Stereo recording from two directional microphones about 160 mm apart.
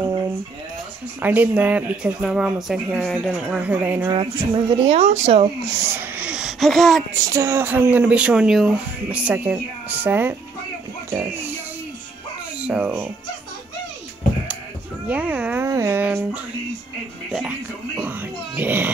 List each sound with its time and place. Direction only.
1.2 s speech: 10° right (ahead or behind)
4.1 s speech: 30° right (ahead or behind)
5.7 s speech: 15° right (ahead or behind); by 7.1 s centre (ahead or behind)
7.2 s speech: 20° right (ahead or behind)
12.5 s speech: 10° right (ahead or behind)
15.0 s speech: 10° right (ahead or behind)
17.3 s music: centre (ahead or behind)
17.9 s wail: 10° right (ahead or behind)